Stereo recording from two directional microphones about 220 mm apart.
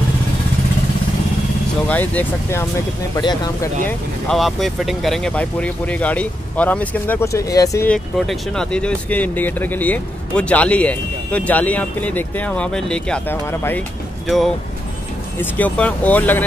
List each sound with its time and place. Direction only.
1.9 s speech: 5° left (ahead or behind)
3.2 s speech: 20° left (ahead or behind)
3.8 s speech: centre (ahead or behind)
15.5 s speech: 5° left (ahead or behind)